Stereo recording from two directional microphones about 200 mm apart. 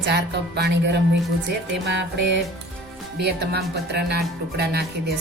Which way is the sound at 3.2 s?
55° right (ahead or behind).